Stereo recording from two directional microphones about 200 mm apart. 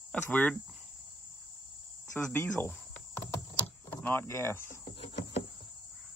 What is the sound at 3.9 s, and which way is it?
Speech, 10° left (ahead or behind).